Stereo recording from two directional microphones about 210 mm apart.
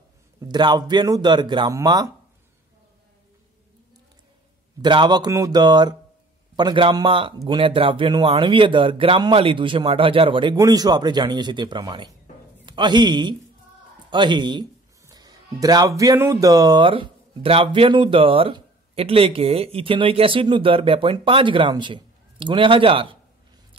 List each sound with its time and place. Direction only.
0.4 s speech: 20° right (ahead or behind)
4.8 s a man's voice: 20° right (ahead or behind)